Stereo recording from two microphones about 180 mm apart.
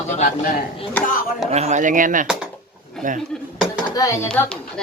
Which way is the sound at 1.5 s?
40° right (ahead or behind).